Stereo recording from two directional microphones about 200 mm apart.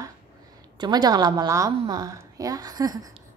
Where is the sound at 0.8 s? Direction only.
20° right (ahead or behind).